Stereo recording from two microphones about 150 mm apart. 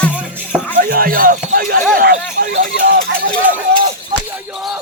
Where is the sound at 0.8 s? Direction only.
80° right.